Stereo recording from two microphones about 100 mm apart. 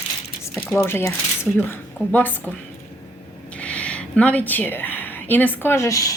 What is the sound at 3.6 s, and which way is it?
A woman's voice, 10° left (ahead or behind).